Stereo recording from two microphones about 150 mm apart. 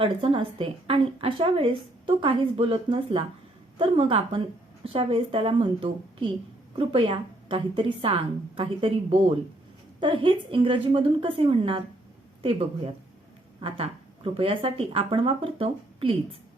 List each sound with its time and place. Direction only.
0.0 s a woman's voice: 40° right (ahead or behind)